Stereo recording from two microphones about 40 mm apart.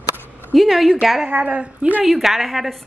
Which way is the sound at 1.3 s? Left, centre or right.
Right.